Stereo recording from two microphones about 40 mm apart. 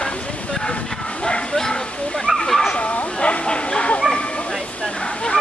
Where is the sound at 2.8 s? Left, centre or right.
Left.